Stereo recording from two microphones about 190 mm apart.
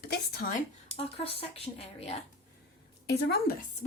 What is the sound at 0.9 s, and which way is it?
Speech, 30° left (ahead or behind).